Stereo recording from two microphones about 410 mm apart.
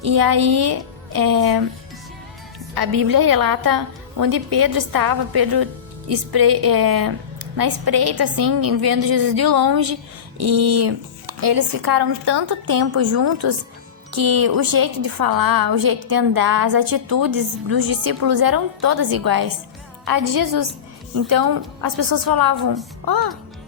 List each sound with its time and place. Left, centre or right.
0.0 s a woman's voice: right
2.7 s a woman's voice: right
11.3 s a woman's voice: right